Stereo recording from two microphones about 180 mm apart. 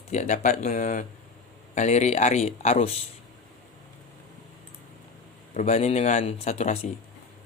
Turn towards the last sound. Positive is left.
turn(degrees=35)  # may be behind; listen again after turning